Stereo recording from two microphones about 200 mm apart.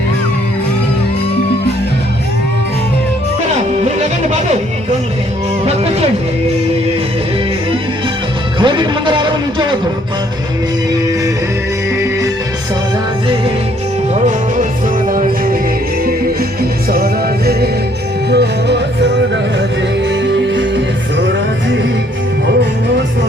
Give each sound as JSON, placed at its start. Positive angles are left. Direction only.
{"t": 3.6, "sound": "music", "side_deg": -35}
{"t": 5.6, "sound": "music", "side_deg": -30}
{"t": 8.5, "sound": "music", "side_deg": -25}
{"t": 14.1, "sound": "music", "side_deg": -40}
{"t": 16.9, "sound": "music", "side_deg": -50}
{"t": 20.1, "sound": "music", "side_deg": -65}